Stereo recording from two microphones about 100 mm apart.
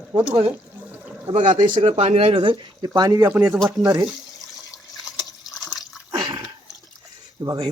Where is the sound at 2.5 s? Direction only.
45° right (ahead or behind).